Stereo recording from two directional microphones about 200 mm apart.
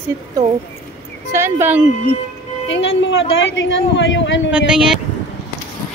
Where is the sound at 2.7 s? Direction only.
65° left (ahead or behind).